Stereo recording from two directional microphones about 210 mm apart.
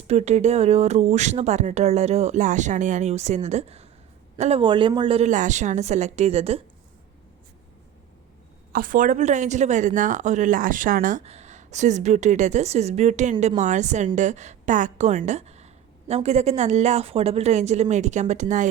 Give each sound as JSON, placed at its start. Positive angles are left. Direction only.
{"t": 0.1, "sound": "speech", "side_deg": -30}
{"t": 8.7, "sound": "speech", "side_deg": -40}